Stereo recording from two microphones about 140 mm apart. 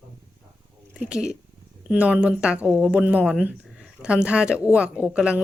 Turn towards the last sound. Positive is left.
turn(degrees=-10)  # may be behind; listen again after turning